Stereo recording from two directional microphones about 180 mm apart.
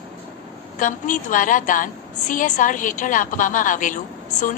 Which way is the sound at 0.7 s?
45° left (ahead or behind).